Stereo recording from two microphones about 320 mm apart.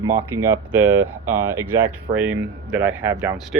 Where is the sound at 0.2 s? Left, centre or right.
Centre.